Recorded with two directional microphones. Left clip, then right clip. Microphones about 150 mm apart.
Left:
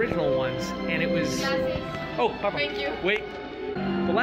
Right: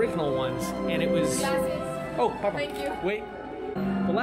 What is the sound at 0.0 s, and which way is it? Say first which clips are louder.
Speech: left 2 dB; 25° right (ahead or behind).